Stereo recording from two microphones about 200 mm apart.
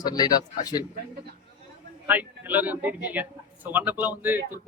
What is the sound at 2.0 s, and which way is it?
Speech, 10° right (ahead or behind).